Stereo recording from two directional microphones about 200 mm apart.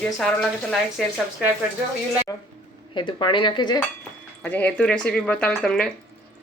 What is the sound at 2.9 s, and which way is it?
Speech, 25° left (ahead or behind).